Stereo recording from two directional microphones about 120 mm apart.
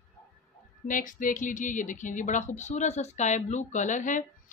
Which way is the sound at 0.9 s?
90° left.